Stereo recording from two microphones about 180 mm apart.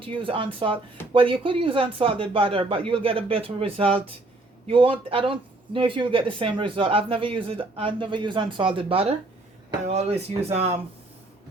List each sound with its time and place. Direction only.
0.0 s speech: 30° right (ahead or behind)